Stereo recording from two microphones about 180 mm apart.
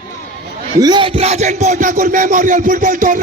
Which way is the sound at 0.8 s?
25° right (ahead or behind).